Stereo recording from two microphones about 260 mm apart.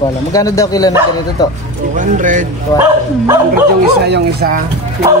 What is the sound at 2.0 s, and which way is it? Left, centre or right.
Speech, right.